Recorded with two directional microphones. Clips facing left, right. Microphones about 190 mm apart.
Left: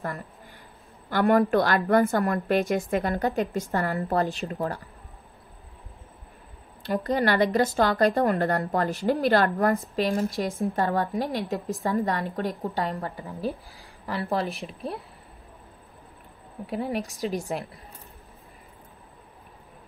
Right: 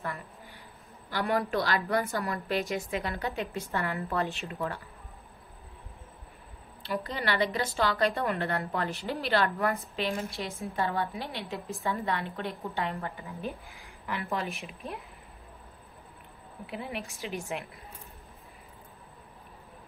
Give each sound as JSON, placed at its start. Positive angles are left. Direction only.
{"t": 1.1, "sound": "a woman's voice", "side_deg": 50}
{"t": 6.8, "sound": "a woman's voice", "side_deg": 45}
{"t": 16.6, "sound": "a woman's voice", "side_deg": 40}